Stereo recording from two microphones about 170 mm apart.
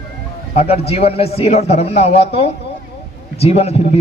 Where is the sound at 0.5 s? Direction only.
35° left (ahead or behind).